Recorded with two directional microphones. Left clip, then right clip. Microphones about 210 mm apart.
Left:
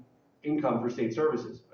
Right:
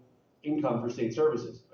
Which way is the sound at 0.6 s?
15° right (ahead or behind).